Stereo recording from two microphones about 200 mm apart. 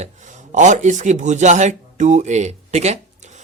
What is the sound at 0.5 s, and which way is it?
A man's voice, 40° right (ahead or behind).